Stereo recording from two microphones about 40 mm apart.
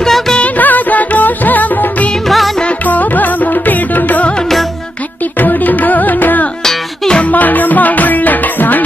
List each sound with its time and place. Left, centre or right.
0.0 s music: centre
0.4 s music: left
2.2 s music: centre
2.9 s music: left
5.4 s music: left